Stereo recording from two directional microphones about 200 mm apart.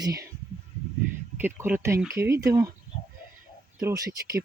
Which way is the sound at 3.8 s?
15° right (ahead or behind).